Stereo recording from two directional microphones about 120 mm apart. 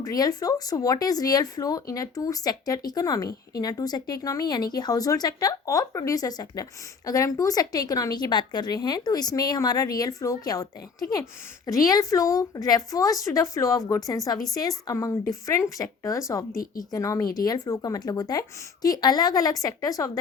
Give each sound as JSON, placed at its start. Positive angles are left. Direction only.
{"t": 0.0, "sound": "a woman's voice", "side_deg": 30}